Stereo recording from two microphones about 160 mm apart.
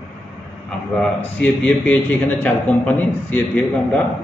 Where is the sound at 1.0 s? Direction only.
10° left (ahead or behind).